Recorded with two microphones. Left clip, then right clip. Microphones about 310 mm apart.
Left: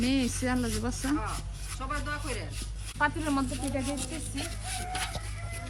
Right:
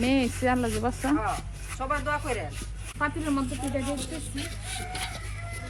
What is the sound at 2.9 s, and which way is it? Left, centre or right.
Speech, left.